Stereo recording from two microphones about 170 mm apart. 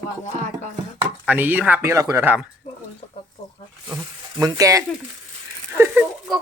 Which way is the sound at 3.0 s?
40° left (ahead or behind).